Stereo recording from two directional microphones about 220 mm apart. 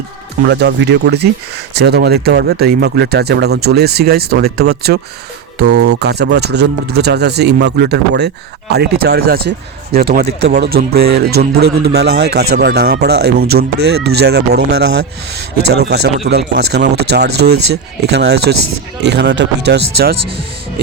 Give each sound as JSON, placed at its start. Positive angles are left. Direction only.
{"t": 0.4, "sound": "speech", "side_deg": -50}